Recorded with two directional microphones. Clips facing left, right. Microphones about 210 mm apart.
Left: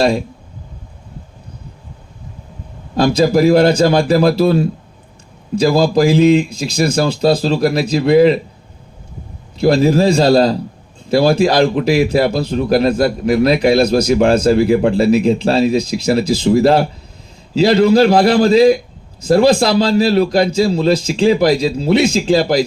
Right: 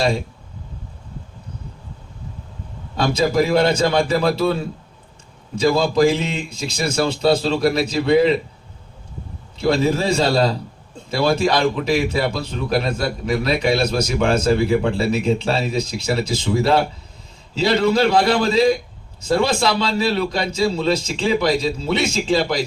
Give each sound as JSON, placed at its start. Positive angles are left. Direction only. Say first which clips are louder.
{"t": 2.9, "sound": "speech", "louder": "left 6 dB", "side_deg": 35}
{"t": 5.5, "sound": "speech", "louder": "left 4 dB", "side_deg": 35}
{"t": 9.6, "sound": "speech", "louder": "left 6 dB", "side_deg": 35}